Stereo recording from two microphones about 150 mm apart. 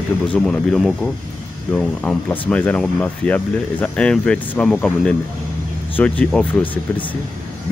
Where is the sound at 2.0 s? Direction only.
10° left (ahead or behind).